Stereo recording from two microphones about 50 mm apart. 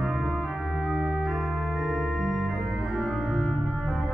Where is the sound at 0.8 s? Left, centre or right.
Centre.